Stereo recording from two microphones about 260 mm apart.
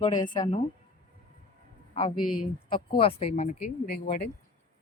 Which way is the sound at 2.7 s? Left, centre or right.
Left.